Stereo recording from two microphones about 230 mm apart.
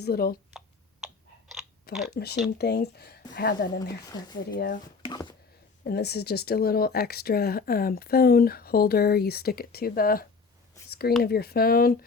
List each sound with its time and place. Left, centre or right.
0.0 s speech: left
1.0 s chewing: centre
2.1 s speech: left
4.0 s speech: centre
4.5 s speech: left
5.0 s speech: centre
5.8 s speech: left
10.8 s a sound: left
11.2 s speech: left